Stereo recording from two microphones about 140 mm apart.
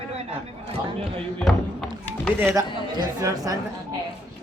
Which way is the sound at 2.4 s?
20° right (ahead or behind).